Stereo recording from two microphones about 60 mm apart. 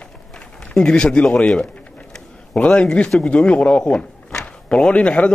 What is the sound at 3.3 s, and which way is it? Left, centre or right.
A man's voice, centre.